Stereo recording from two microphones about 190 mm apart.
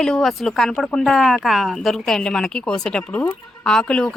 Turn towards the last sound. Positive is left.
turn(degrees=5)  # may be behind; listen again after turning